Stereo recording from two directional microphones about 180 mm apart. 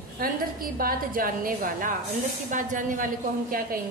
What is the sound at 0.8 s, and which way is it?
A woman's voice, 50° right (ahead or behind).